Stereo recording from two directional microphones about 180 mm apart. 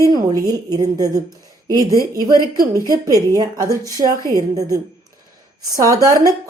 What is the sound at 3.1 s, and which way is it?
Speech, 20° right (ahead or behind).